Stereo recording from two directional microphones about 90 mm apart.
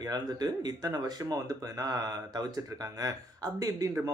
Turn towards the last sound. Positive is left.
turn(degrees=-40)  # may be behind; listen again after turning